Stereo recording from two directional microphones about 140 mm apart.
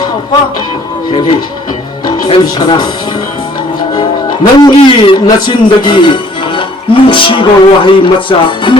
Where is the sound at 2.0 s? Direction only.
30° left (ahead or behind).